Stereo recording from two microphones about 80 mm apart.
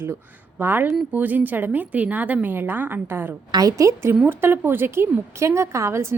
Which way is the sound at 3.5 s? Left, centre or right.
Right.